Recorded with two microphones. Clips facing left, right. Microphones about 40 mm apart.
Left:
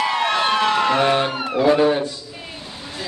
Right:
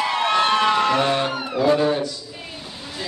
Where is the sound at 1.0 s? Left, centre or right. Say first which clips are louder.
Left 3 dB; left.